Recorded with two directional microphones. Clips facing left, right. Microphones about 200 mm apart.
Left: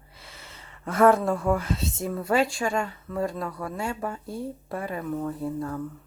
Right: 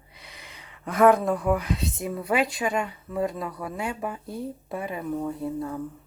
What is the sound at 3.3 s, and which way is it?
Speech, centre (ahead or behind).